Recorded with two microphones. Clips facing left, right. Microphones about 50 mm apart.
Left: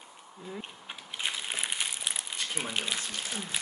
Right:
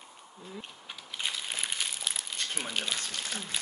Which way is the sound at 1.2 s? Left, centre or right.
Centre.